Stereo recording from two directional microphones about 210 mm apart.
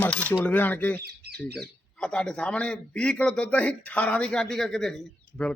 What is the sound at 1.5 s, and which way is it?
Speech, 5° left (ahead or behind).